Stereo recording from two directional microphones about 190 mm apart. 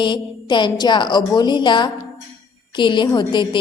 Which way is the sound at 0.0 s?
25° left (ahead or behind).